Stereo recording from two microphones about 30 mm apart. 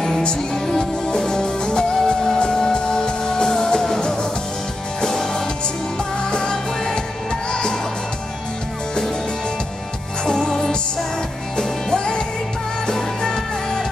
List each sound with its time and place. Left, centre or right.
0.7 s music: left
10.2 s music: left